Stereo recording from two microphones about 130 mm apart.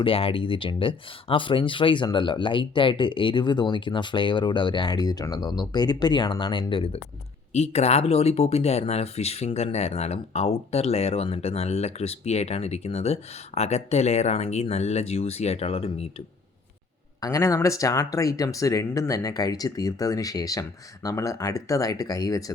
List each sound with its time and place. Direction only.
0.0 s speech: 45° left (ahead or behind)
7.5 s speech: 55° left (ahead or behind)
17.2 s speech: 25° left (ahead or behind)